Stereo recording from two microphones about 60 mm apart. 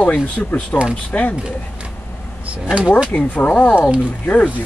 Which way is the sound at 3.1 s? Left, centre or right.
Left.